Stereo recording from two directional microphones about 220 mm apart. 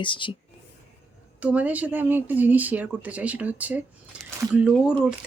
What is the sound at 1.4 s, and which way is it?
Speech, 5° right (ahead or behind).